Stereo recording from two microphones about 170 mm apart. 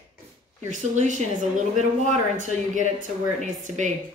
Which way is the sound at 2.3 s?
50° right (ahead or behind).